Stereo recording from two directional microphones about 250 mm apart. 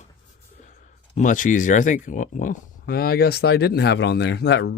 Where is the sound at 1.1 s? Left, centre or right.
Left.